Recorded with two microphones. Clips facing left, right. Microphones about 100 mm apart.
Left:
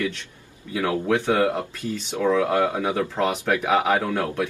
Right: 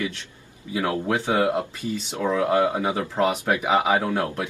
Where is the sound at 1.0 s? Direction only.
15° right (ahead or behind).